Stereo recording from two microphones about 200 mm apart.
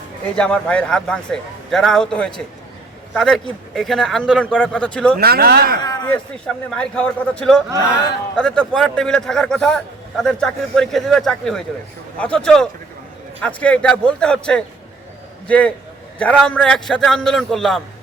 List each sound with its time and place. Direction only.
0.3 s speech: 5° left (ahead or behind)
5.2 s speech: 50° right (ahead or behind)
6.7 s a man's voice: 5° left (ahead or behind)